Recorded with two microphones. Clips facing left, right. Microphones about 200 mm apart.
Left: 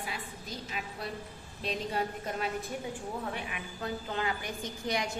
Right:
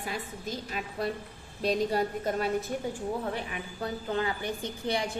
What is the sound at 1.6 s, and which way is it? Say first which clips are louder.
Speech: right 6 dB; 40° right (ahead or behind).